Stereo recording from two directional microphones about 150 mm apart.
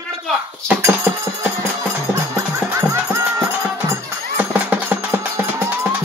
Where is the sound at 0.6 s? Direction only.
15° right (ahead or behind).